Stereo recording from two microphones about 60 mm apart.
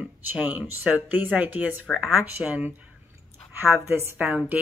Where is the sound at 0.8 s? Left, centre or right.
Right.